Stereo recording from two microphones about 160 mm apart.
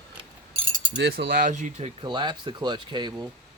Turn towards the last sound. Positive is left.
turn(degrees=-25)  # may be behind; listen again after turning